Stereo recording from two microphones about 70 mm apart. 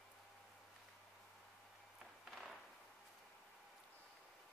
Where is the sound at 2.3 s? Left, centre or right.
Centre.